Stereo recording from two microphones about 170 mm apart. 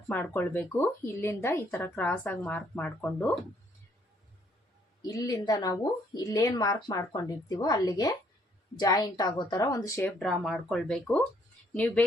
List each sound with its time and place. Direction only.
0.1 s speech: 10° left (ahead or behind)
5.1 s speech: 20° left (ahead or behind)
10.2 s speech: centre (ahead or behind)